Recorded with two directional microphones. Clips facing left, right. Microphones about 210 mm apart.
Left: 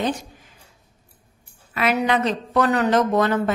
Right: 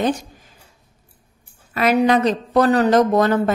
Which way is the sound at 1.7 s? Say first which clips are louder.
Right 5 dB; 40° right (ahead or behind).